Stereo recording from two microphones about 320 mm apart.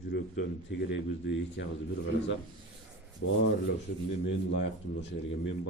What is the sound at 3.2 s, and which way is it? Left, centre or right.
Speech, left.